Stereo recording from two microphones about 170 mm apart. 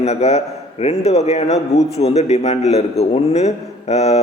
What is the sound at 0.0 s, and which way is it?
A man's voice, 40° left (ahead or behind).